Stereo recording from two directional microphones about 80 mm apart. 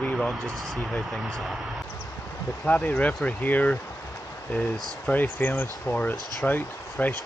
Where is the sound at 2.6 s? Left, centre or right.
Centre.